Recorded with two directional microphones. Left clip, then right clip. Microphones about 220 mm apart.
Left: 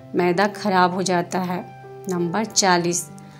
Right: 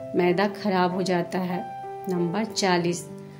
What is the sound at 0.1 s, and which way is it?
A woman's voice, 10° left (ahead or behind).